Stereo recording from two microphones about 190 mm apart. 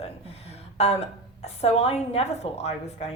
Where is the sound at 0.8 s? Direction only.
35° left (ahead or behind).